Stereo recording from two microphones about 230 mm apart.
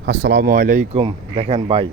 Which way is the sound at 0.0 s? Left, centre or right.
Right.